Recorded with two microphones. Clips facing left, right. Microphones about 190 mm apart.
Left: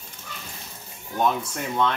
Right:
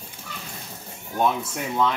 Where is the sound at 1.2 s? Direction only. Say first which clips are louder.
Right 1 dB; 5° right (ahead or behind).